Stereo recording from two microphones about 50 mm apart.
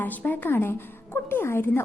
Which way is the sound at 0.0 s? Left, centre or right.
Left.